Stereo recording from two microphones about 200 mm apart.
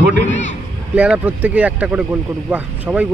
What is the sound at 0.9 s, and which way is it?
A man's voice, 5° right (ahead or behind).